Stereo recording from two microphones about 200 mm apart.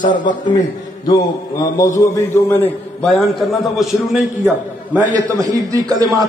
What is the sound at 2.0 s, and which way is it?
A man's voice, 10° left (ahead or behind).